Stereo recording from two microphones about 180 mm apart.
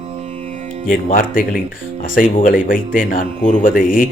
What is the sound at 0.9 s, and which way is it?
Speech, 50° left (ahead or behind).